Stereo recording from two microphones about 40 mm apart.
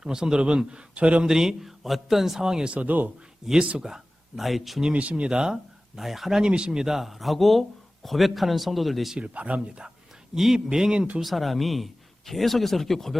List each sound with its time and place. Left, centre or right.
0.0 s a man's voice: centre
1.2 s a man's voice: centre
2.8 s speech: right
3.4 s a man's voice: centre
4.4 s a man's voice: centre
4.9 s a man's voice: right
6.0 s a man's voice: centre
6.4 s a man's voice: right; by 9.1 s centre
9.1 s a man's voice: right
9.6 s a man's voice: right
10.3 s a man's voice: centre
11.2 s a man's voice: centre